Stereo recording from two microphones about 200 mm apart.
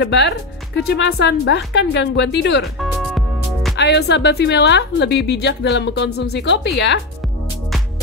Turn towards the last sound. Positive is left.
turn(degrees=60)  # may be behind; listen again after turning